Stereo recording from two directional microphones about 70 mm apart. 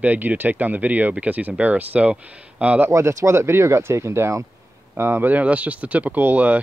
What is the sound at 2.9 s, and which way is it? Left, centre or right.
Speech, right.